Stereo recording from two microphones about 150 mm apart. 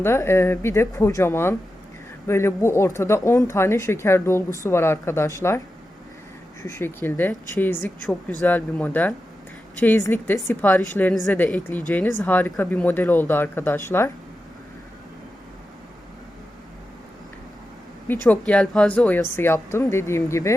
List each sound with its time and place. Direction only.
0.0 s speech: 15° left (ahead or behind)
6.7 s speech: 15° left (ahead or behind)
18.1 s speech: 10° left (ahead or behind)